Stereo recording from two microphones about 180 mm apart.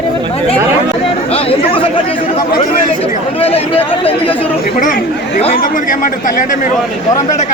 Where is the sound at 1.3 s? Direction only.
30° left (ahead or behind).